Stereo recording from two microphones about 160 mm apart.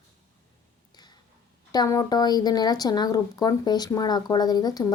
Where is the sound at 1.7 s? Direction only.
25° left (ahead or behind).